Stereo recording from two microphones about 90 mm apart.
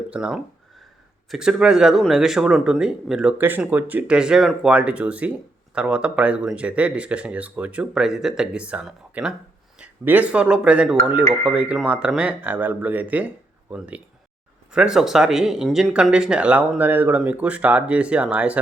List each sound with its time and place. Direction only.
0.1 s speech: 10° right (ahead or behind)
3.3 s speech: 20° right (ahead or behind)